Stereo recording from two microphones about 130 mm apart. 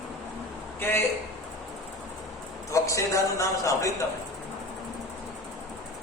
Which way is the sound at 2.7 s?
25° left (ahead or behind).